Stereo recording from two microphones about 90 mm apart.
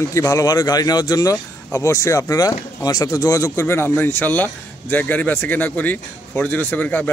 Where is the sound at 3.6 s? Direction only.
25° left (ahead or behind).